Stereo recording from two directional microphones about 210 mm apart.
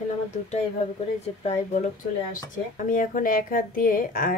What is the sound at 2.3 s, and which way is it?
Speech, 40° left (ahead or behind).